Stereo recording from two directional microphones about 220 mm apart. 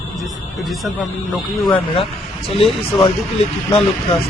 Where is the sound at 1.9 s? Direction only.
25° left (ahead or behind).